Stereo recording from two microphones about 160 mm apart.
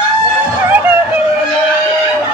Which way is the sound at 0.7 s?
15° right (ahead or behind).